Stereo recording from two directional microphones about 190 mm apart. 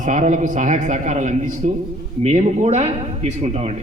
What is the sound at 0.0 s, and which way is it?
A man's voice, 40° right (ahead or behind).